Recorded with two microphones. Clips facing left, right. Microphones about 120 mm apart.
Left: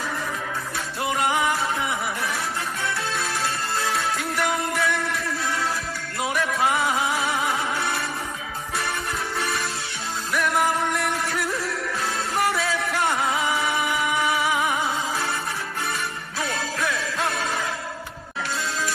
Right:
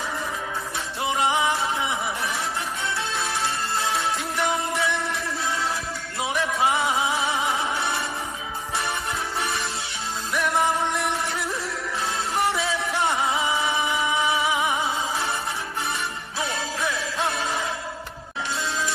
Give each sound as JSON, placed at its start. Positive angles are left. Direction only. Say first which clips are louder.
{"t": 1.1, "sound": "music", "louder": "even", "side_deg": -20}
{"t": 3.4, "sound": "music", "louder": "even", "side_deg": -25}
{"t": 6.2, "sound": "a sound", "louder": "even", "side_deg": -20}
{"t": 7.4, "sound": "music", "louder": "even", "side_deg": -25}
{"t": 11.1, "sound": "music", "louder": "left 1 dB", "side_deg": -25}